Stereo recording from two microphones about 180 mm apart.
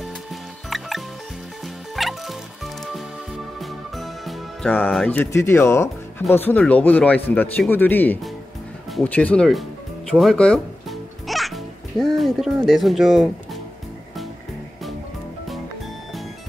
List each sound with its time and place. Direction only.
0.0 s music: centre (ahead or behind)
6.3 s speech: 10° left (ahead or behind)
10.1 s music: centre (ahead or behind)
12.6 s speech: centre (ahead or behind)